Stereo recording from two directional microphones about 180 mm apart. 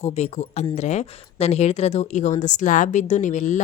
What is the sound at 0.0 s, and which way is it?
Speech, 35° left (ahead or behind).